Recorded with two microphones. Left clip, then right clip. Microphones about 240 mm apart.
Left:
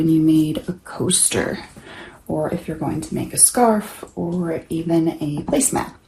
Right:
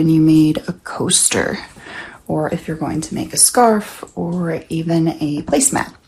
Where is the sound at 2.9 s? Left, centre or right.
Right.